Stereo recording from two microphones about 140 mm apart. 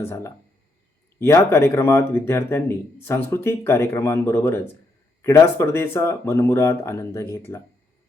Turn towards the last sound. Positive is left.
turn(degrees=20)  # may be behind; listen again after turning